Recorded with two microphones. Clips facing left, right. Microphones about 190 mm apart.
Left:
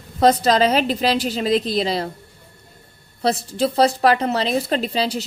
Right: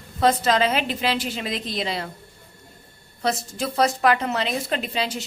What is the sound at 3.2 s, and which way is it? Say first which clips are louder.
A woman's voice: left 5 dB; 30° left (ahead or behind).